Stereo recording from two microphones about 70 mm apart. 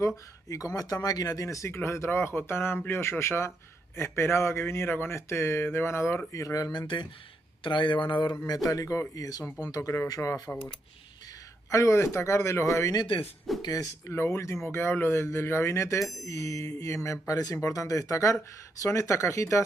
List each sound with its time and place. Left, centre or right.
0.0 s speech: left
1.7 s a man's voice: left
6.3 s speech: left
6.7 s speech: left
8.6 s speech: left
11.7 s a man's voice: left
13.5 s speech: centre
14.0 s a man's voice: left